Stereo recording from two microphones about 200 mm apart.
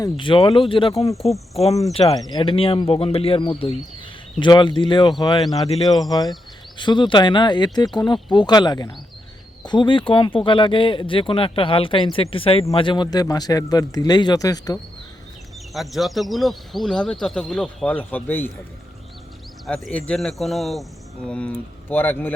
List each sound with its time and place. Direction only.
0.0 s speech: 25° left (ahead or behind)
1.1 s speech: centre (ahead or behind)
2.1 s speech: 20° left (ahead or behind)
15.7 s speech: centre (ahead or behind)
19.6 s speech: centre (ahead or behind)